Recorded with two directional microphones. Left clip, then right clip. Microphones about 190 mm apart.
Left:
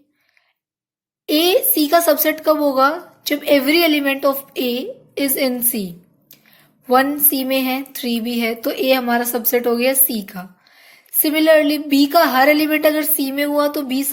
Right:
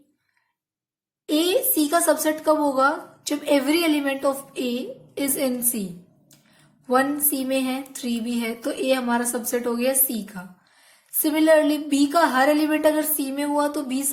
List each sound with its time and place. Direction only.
1.3 s speech: 30° left (ahead or behind)
6.8 s speech: 30° left (ahead or behind)